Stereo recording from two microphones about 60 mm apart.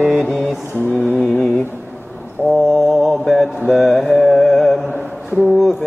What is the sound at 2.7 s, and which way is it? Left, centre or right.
Mantra, centre.